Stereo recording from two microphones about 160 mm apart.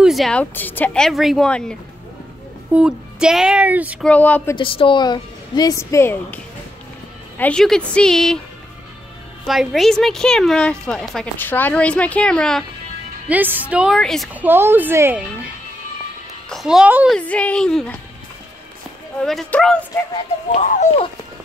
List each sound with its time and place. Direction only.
0.0 s a woman's voice: centre (ahead or behind)
4.0 s speech: 10° left (ahead or behind)
4.6 s a woman's voice: 35° left (ahead or behind); by 8.4 s 5° left (ahead or behind)
9.5 s a woman's voice: centre (ahead or behind)
13.3 s a woman's voice: 10° right (ahead or behind)
14.3 s a child's voice: 10° right (ahead or behind)
17.1 s speech: 10° left (ahead or behind)
19.2 s a woman's voice: centre (ahead or behind)
20.5 s speech: 50° left (ahead or behind)